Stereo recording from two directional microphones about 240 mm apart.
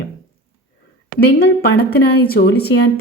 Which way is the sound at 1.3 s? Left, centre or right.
Left.